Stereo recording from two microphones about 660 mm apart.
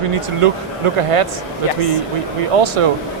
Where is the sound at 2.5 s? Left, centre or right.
Right.